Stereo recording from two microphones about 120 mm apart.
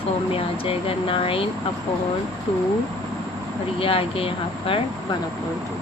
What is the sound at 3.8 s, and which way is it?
Speech, 50° left (ahead or behind).